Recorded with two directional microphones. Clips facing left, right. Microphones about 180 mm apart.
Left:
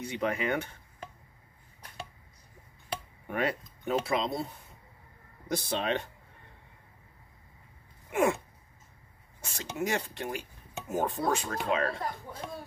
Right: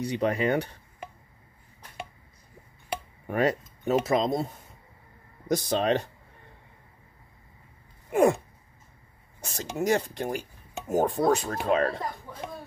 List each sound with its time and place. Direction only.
0.0 s speech: 35° right (ahead or behind)
3.3 s speech: 40° right (ahead or behind)
5.7 s speech: 40° right (ahead or behind)
8.1 s gasp: 40° right (ahead or behind)
9.4 s speech: 40° right (ahead or behind)